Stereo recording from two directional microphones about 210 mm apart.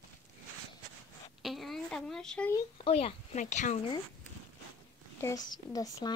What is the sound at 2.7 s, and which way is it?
Speech, 30° left (ahead or behind).